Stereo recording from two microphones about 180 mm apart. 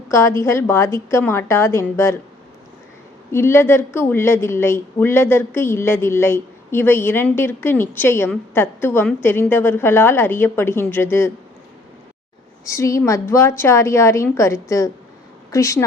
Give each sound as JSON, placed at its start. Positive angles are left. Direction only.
{"t": 0.1, "sound": "a woman's voice", "side_deg": 15}
{"t": 3.3, "sound": "a woman's voice", "side_deg": 15}
{"t": 12.6, "sound": "a woman's voice", "side_deg": 15}